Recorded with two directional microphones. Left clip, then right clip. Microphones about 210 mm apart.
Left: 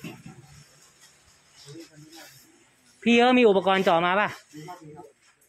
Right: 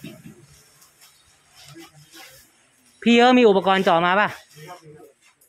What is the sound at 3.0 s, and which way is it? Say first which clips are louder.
Speech: right 4 dB; 25° right (ahead or behind).